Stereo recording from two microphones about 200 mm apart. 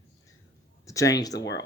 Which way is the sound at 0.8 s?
15° left (ahead or behind).